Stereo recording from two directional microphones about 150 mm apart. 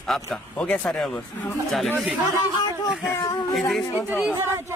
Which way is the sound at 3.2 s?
30° left (ahead or behind).